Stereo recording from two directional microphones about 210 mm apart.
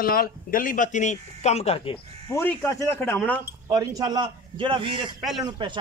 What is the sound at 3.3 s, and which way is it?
A man's voice, 15° right (ahead or behind).